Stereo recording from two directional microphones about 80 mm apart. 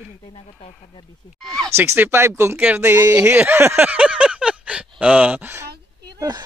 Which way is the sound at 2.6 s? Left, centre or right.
Right.